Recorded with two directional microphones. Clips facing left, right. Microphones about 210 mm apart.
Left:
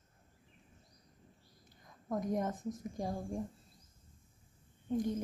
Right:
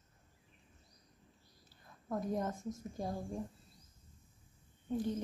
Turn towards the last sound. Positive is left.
turn(degrees=15)  # may be behind; listen again after turning